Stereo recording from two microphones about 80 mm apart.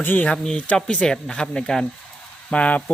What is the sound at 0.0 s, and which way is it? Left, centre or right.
Speech, left.